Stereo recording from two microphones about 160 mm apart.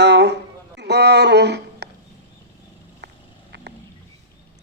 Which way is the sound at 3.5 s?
90° right.